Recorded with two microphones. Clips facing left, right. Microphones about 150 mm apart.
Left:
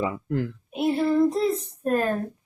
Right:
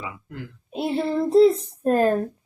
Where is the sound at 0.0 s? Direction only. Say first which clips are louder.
Left 10 dB; 40° left (ahead or behind).